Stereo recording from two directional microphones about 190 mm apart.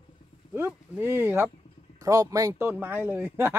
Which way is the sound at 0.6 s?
10° right (ahead or behind).